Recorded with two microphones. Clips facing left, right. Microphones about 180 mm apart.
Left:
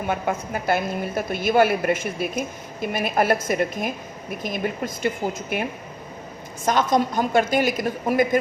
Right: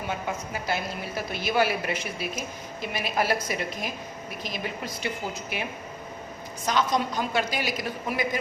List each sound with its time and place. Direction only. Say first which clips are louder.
0.1 s a woman's voice: left 7 dB; 55° left (ahead or behind)
6.7 s a woman's voice: left 5 dB; 50° left (ahead or behind)